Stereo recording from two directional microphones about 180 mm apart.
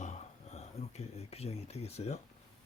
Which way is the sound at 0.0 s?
40° left (ahead or behind).